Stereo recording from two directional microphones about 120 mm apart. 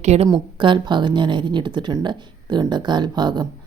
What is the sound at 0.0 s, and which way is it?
Speech, 65° right (ahead or behind).